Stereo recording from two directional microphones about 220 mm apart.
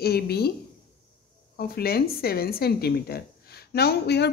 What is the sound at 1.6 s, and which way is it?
Speech, 45° left (ahead or behind).